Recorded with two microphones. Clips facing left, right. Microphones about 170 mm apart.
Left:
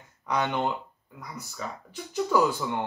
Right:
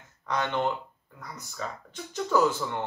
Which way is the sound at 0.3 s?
15° left (ahead or behind).